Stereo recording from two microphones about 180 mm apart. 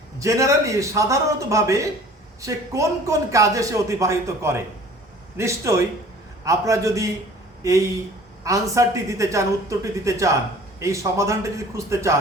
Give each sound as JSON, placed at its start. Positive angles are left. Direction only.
{"t": 0.2, "sound": "speech", "side_deg": -15}